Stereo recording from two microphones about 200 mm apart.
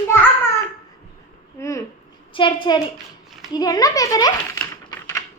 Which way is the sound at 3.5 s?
20° left (ahead or behind).